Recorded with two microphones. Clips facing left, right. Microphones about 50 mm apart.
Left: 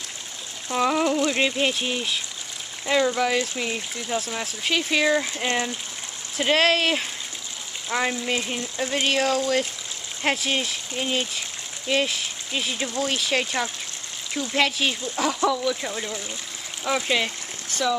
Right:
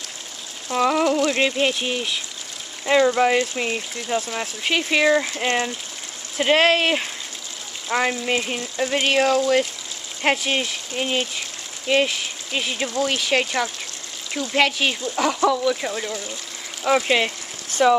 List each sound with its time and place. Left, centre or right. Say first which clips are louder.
0.7 s speech: right 3 dB; centre
2.8 s speech: right 5 dB; centre
6.3 s speech: right 3 dB; centre
12.9 s speech: right 4 dB; right
17.8 s speech: right 8 dB; right